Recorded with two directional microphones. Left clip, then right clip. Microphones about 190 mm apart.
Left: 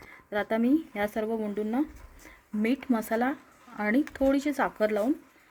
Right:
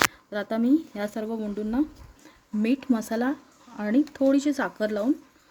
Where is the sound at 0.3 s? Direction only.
10° right (ahead or behind).